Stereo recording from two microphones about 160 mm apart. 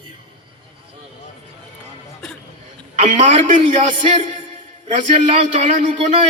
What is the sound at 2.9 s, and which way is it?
Speech, 45° right (ahead or behind).